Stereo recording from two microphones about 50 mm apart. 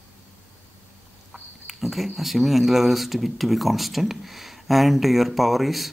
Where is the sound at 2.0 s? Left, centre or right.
Centre.